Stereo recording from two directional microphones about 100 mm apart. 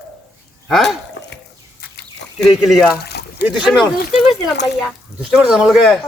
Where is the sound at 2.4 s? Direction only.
5° right (ahead or behind).